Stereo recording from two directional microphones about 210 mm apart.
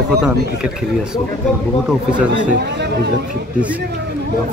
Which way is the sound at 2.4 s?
50° right (ahead or behind).